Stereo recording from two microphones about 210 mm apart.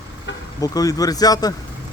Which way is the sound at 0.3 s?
60° left (ahead or behind).